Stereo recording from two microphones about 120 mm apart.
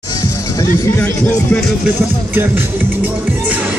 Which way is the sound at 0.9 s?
15° left (ahead or behind).